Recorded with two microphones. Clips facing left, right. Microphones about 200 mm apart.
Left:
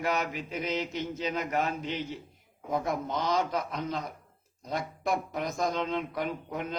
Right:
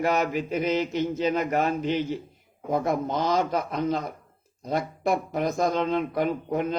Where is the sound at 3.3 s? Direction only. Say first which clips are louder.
Right 5 dB; 50° right (ahead or behind).